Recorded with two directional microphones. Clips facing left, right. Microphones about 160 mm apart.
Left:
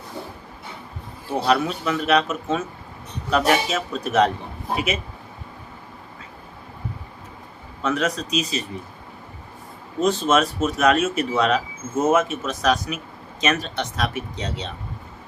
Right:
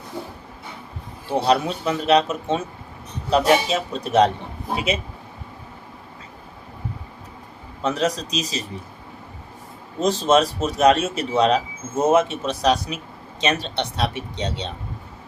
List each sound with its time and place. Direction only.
1.3 s speech: 30° right (ahead or behind)
7.8 s speech: 35° right (ahead or behind)
10.0 s speech: 35° right (ahead or behind)